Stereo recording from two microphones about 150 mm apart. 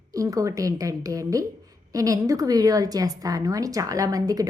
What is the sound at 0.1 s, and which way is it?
A woman's voice, 20° right (ahead or behind).